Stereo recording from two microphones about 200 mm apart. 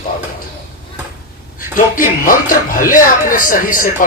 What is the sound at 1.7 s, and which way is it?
Speech, 45° left (ahead or behind).